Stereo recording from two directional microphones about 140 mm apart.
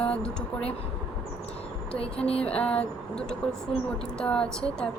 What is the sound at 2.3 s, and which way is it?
Music, 45° left (ahead or behind).